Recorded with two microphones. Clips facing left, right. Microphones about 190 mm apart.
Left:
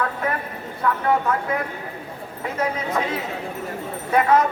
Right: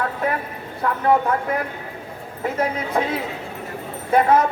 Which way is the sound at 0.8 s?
35° right (ahead or behind).